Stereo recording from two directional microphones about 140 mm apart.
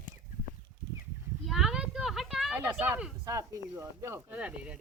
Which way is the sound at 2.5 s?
15° right (ahead or behind).